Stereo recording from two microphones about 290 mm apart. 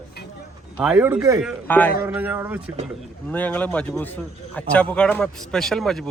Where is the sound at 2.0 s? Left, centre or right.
Centre.